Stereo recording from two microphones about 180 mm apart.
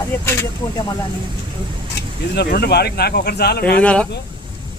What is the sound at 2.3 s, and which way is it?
Speech, 65° left (ahead or behind).